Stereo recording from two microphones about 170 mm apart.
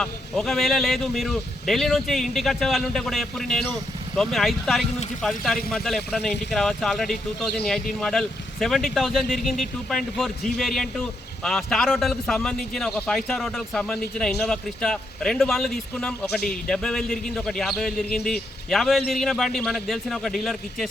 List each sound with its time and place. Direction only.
0.0 s a man's voice: 5° left (ahead or behind)